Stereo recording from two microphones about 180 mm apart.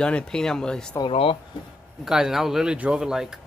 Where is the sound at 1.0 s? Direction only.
30° left (ahead or behind).